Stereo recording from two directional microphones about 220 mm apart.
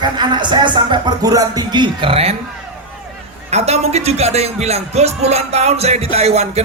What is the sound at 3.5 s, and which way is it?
Speech, 30° right (ahead or behind).